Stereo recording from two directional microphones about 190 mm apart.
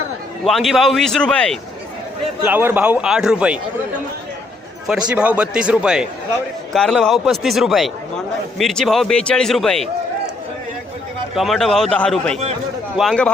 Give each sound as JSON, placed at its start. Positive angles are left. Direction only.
{"t": 0.4, "sound": "a man's voice", "side_deg": 0}
{"t": 2.4, "sound": "a man's voice", "side_deg": -10}
{"t": 4.9, "sound": "a man's voice", "side_deg": -5}
{"t": 11.3, "sound": "a man's voice", "side_deg": 0}